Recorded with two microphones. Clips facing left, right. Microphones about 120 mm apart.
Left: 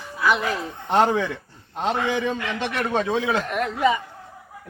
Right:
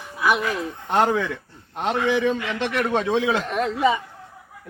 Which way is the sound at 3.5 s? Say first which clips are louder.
Even; 20° right (ahead or behind).